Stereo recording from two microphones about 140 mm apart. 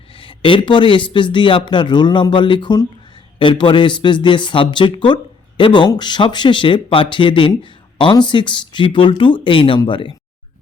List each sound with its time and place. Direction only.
0.1 s speech: 40° left (ahead or behind)